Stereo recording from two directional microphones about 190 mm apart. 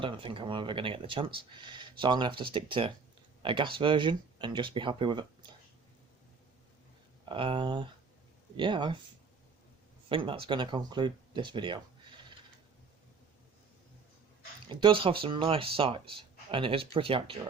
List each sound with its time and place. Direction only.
0.0 s speech: 25° right (ahead or behind)
7.3 s speech: 25° right (ahead or behind)
10.1 s speech: 25° right (ahead or behind)
14.7 s speech: 25° right (ahead or behind)